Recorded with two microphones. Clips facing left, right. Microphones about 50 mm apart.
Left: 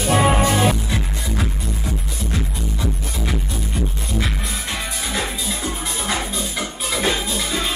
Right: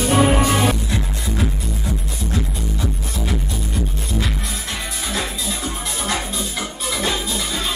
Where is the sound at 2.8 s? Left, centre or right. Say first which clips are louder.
Left 1 dB; centre.